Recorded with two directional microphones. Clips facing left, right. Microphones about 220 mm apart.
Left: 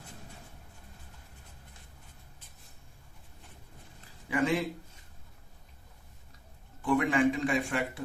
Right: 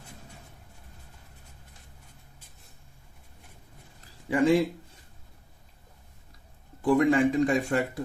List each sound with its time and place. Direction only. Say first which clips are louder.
4.3 s a man's voice: right 7 dB; 30° right (ahead or behind)
6.8 s a man's voice: right 4 dB; 35° right (ahead or behind)